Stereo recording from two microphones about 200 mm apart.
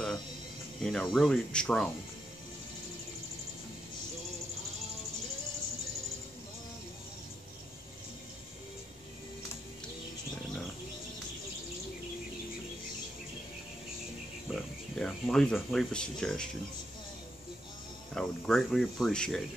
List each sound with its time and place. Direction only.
0.8 s speech: centre (ahead or behind)
14.5 s speech: centre (ahead or behind)
18.1 s speech: centre (ahead or behind)